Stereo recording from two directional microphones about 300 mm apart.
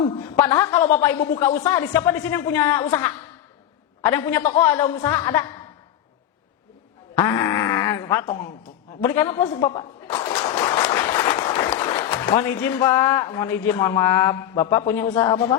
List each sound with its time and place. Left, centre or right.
0.0 s a man's voice: centre
1.7 s a man's voice: centre
7.2 s a man's voice: centre